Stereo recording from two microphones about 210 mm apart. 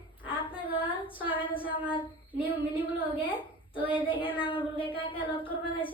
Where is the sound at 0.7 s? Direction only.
25° left (ahead or behind).